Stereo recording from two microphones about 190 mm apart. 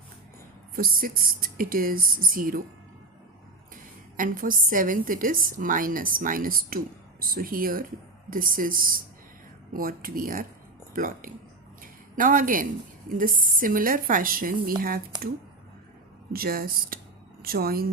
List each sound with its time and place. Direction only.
0.8 s a woman's voice: 50° right (ahead or behind)
4.2 s a woman's voice: 45° right (ahead or behind)
11.8 s a sound: 45° right (ahead or behind)
13.1 s a woman's voice: 45° right (ahead or behind)
16.3 s a woman's voice: 50° right (ahead or behind)